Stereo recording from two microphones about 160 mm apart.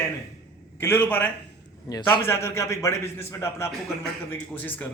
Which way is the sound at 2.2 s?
15° left (ahead or behind).